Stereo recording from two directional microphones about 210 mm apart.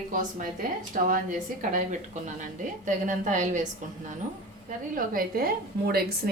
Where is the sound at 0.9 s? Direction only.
40° right (ahead or behind).